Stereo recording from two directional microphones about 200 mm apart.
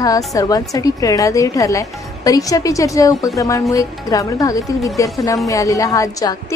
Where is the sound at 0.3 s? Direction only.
15° left (ahead or behind).